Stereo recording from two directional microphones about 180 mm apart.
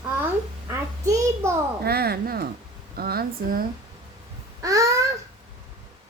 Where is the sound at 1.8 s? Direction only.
60° right (ahead or behind).